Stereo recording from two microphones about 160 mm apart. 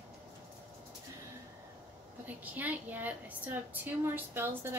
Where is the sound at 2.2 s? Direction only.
10° right (ahead or behind).